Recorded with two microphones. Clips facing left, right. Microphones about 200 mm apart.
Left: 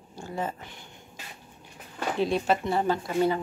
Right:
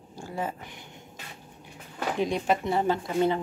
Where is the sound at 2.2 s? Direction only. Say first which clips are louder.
Left 1 dB; 15° right (ahead or behind).